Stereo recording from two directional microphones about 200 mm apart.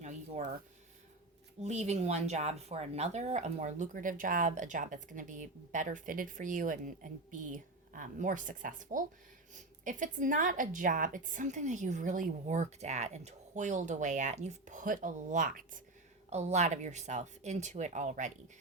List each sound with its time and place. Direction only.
1.6 s speech: 35° right (ahead or behind)